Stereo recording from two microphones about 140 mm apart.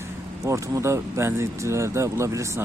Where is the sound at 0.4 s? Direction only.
20° right (ahead or behind).